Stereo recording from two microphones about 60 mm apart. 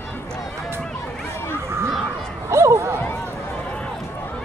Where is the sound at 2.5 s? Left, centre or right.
Right.